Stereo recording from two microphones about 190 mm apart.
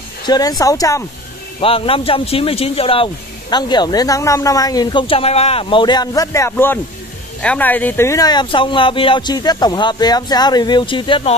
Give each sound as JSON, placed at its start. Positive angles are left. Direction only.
{"t": 0.3, "sound": "speech", "side_deg": 20}
{"t": 1.6, "sound": "speech", "side_deg": 30}